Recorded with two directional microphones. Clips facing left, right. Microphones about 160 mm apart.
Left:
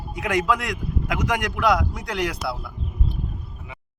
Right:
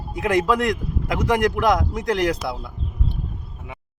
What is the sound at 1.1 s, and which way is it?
Speech, 35° right (ahead or behind).